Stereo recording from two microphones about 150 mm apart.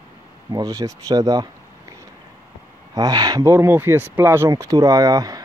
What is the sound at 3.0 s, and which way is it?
Speech, 25° right (ahead or behind).